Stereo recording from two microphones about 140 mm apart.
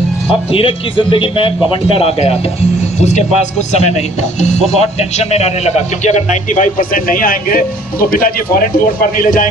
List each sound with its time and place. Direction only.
0.3 s a man's voice: 40° left (ahead or behind)
3.0 s speech: 55° left (ahead or behind); by 8.3 s 90° left
8.7 s speech: 75° left (ahead or behind)